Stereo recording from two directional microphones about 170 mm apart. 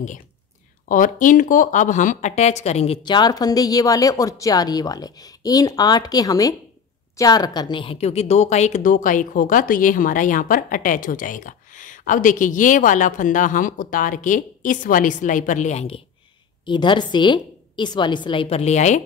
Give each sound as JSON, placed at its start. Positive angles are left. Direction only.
{"t": 0.8, "sound": "a woman's voice", "side_deg": 55}
{"t": 16.6, "sound": "a woman's voice", "side_deg": 30}